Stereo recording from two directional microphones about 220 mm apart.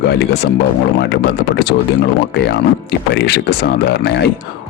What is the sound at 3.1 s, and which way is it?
Speech, 50° left (ahead or behind).